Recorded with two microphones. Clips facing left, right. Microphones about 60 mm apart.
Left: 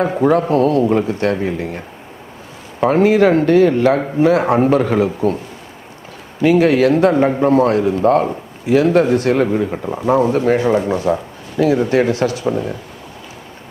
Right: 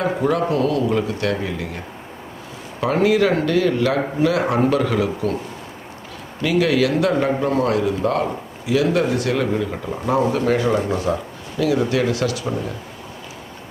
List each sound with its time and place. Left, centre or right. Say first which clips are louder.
0.0 s speech: left 5 dB; left
2.8 s speech: left 5 dB; left
6.4 s speech: left 6 dB; left